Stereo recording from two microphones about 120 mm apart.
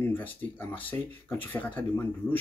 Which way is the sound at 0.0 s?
15° left (ahead or behind).